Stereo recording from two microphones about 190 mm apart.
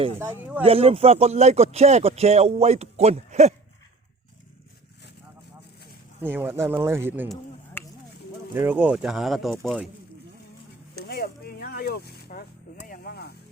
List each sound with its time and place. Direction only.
0.2 s speech: 10° right (ahead or behind)
0.6 s speech: 30° right (ahead or behind)
6.2 s speech: 10° right (ahead or behind)
7.8 s a sound: 10° left (ahead or behind)
8.5 s speech: 10° right (ahead or behind)
11.1 s a sound: 55° left (ahead or behind)
12.9 s vehicle: 50° left (ahead or behind)